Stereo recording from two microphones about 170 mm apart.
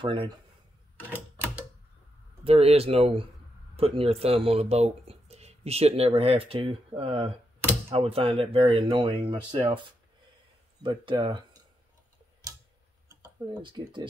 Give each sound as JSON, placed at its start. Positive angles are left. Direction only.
{"t": 0.0, "sound": "speech", "side_deg": -30}
{"t": 2.4, "sound": "speech", "side_deg": -35}
{"t": 13.2, "sound": "speech", "side_deg": -25}